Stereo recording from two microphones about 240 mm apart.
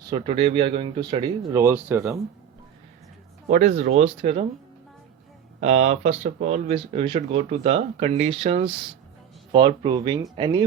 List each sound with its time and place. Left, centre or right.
0.1 s speech: right
3.5 s speech: right
5.5 s speech: right